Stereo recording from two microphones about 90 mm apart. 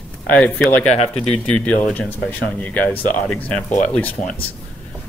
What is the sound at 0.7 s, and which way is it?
Speech, 15° left (ahead or behind).